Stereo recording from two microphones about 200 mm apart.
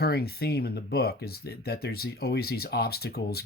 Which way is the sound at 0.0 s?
50° left (ahead or behind).